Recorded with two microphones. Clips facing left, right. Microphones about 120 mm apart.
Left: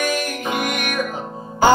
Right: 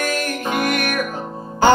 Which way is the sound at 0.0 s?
15° left (ahead or behind).